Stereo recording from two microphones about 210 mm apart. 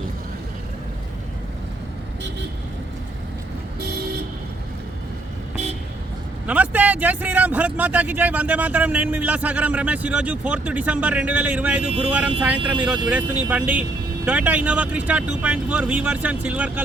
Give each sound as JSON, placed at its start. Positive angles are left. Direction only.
{"t": 3.8, "sound": "vehicle", "side_deg": -50}
{"t": 6.5, "sound": "speech", "side_deg": -5}